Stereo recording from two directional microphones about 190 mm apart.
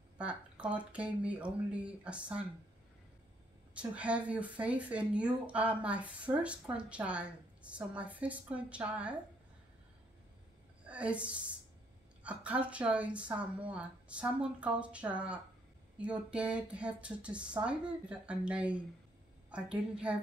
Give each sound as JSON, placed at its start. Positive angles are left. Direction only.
{"t": 0.2, "sound": "speech", "side_deg": -5}
{"t": 3.7, "sound": "speech", "side_deg": -5}
{"t": 10.9, "sound": "a woman's voice", "side_deg": -5}